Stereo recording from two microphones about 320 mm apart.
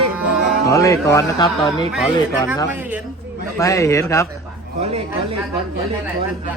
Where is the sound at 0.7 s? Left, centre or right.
Centre.